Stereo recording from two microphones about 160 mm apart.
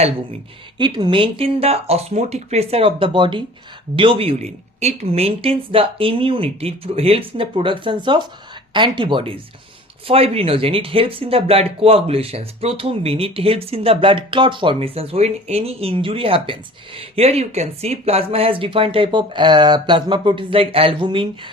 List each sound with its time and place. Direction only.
0.8 s speech: 30° right (ahead or behind)